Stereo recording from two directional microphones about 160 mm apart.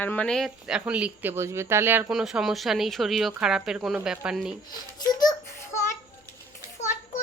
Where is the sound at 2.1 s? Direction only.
5° right (ahead or behind).